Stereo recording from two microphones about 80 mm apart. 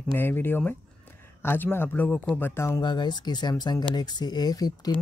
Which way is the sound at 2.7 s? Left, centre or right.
Left.